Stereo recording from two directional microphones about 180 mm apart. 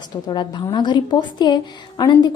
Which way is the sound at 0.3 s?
25° left (ahead or behind).